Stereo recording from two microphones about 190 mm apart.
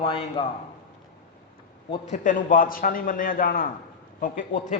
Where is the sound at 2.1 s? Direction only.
45° left (ahead or behind).